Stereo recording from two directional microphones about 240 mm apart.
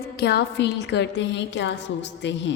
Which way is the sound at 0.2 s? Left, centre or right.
Left.